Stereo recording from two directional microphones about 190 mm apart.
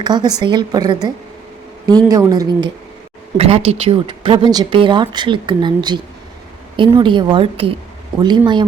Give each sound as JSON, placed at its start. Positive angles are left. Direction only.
{"t": 0.0, "sound": "speech", "side_deg": -20}
{"t": 2.0, "sound": "speech", "side_deg": -20}